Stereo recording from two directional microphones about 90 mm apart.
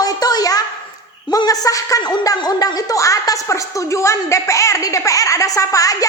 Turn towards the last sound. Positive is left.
turn(degrees=40)  # may be behind; listen again after turning